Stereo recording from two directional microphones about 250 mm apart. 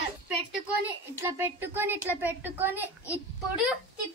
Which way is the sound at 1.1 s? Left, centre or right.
Centre.